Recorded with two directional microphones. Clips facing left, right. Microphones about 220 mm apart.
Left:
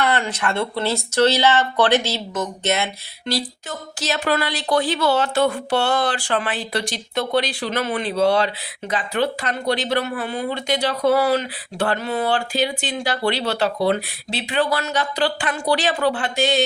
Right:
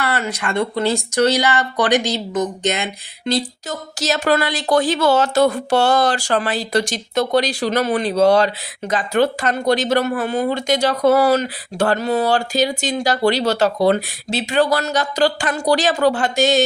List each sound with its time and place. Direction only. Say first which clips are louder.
0.0 s speech: left 1 dB; 5° right (ahead or behind)
3.7 s speech: right 4 dB; 40° right (ahead or behind)